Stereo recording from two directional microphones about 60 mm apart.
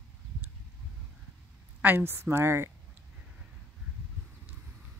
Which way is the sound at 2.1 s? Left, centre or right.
Right.